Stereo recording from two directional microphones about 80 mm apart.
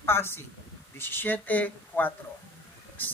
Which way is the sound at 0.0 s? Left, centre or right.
Left.